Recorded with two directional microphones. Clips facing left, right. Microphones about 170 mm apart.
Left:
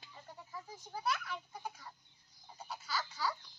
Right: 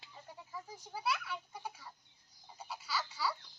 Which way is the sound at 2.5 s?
10° right (ahead or behind).